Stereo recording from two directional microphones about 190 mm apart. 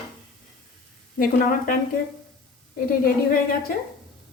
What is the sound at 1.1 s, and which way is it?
Speech, 45° left (ahead or behind).